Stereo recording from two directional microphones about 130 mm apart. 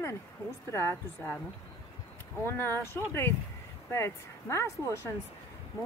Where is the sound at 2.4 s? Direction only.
15° left (ahead or behind).